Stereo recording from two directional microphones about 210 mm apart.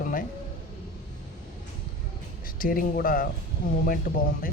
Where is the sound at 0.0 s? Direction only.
40° left (ahead or behind).